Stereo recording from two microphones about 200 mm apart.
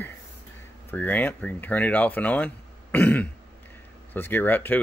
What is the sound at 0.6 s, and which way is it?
Speech, 10° left (ahead or behind).